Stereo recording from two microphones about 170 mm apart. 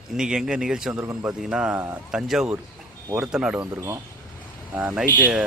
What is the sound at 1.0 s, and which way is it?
Speech, 20° right (ahead or behind).